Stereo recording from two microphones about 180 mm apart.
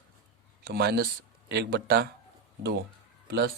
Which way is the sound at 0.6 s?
65° right (ahead or behind).